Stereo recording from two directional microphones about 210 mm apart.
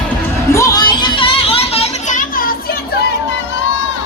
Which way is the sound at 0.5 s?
15° left (ahead or behind).